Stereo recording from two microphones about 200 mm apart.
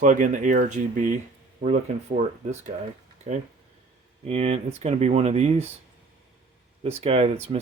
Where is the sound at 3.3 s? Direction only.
40° right (ahead or behind).